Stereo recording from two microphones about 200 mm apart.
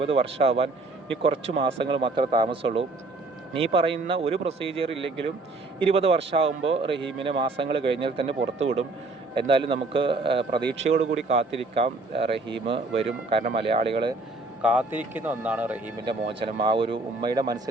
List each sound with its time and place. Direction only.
0.0 s a man's voice: 30° right (ahead or behind)
9.5 s a man's voice: 25° right (ahead or behind)
14.6 s speech: 5° right (ahead or behind)
16.0 s a man's voice: 25° right (ahead or behind)